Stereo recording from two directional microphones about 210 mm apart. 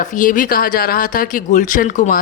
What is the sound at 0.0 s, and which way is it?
Speech, 40° left (ahead or behind).